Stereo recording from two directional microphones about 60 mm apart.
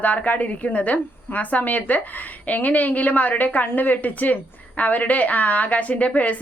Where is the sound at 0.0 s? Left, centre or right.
Left.